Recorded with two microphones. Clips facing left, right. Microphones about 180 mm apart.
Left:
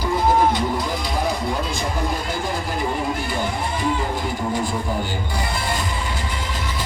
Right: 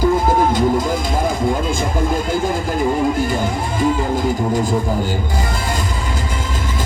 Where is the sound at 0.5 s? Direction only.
45° right (ahead or behind).